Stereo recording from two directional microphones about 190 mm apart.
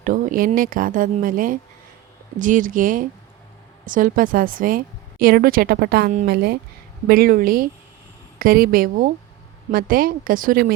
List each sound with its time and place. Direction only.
0.0 s a woman's voice: 45° right (ahead or behind)